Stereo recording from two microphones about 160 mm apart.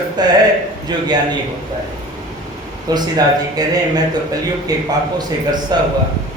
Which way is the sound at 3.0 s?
25° right (ahead or behind).